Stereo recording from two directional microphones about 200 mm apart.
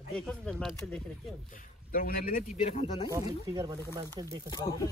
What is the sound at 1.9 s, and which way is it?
Speech, 45° left (ahead or behind).